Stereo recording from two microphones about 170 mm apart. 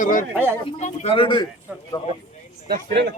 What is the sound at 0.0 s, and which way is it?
Speech, 50° left (ahead or behind).